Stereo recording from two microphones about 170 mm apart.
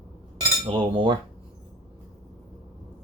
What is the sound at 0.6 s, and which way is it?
Speech, 30° right (ahead or behind).